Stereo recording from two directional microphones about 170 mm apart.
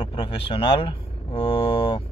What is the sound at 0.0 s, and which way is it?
Speech, 30° left (ahead or behind).